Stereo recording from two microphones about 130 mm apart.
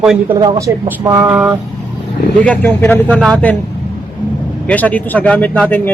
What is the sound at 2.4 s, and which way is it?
A man's voice, 10° left (ahead or behind).